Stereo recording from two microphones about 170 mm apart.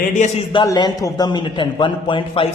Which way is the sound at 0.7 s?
25° left (ahead or behind).